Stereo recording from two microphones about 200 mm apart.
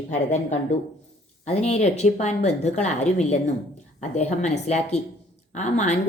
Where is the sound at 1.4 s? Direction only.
35° left (ahead or behind).